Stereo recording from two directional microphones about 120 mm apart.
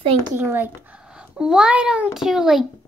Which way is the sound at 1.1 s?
5° right (ahead or behind).